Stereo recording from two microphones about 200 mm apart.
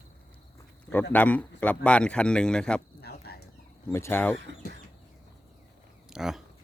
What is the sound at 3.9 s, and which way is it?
Speech, 10° left (ahead or behind).